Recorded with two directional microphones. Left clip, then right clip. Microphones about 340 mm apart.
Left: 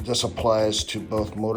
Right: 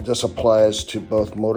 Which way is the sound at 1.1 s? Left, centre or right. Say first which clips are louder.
Right 10 dB; right.